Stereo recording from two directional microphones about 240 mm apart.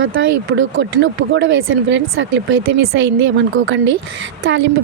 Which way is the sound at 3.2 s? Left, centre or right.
Right.